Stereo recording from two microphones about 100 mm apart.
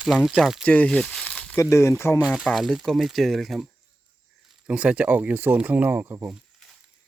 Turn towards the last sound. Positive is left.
turn(degrees=-25)  # may be behind; listen again after turning